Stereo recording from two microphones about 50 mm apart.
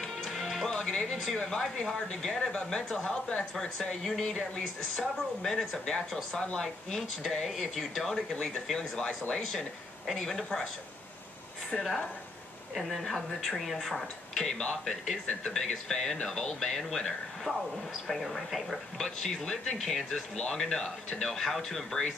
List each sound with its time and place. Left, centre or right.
0.0 s music: centre
0.7 s speech: centre
3.7 s speech: centre
4.2 s speech: centre
11.7 s speech: centre
17.5 s speech: right
18.0 s speech: centre
19.0 s speech: centre